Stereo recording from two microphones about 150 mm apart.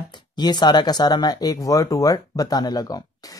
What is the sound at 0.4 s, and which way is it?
Speech, 30° left (ahead or behind).